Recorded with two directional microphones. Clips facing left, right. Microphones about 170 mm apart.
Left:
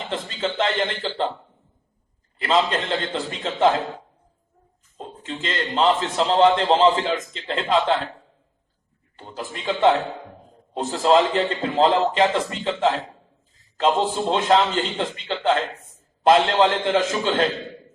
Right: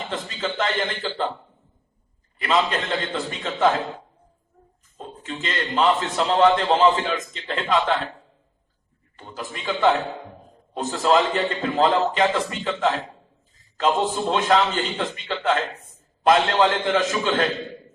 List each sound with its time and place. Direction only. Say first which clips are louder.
0.1 s a man's voice: left 4 dB; 30° left (ahead or behind)
2.4 s a man's voice: left 1 dB; 30° left (ahead or behind)
4.9 s a man's voice: left 1 dB; 25° left (ahead or behind)
9.1 s a man's voice: left 1 dB; 30° left (ahead or behind)